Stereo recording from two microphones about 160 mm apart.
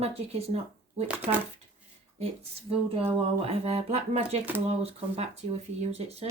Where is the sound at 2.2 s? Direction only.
40° right (ahead or behind).